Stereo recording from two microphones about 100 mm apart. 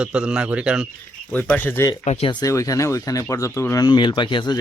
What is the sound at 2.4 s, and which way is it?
Speech, 35° left (ahead or behind).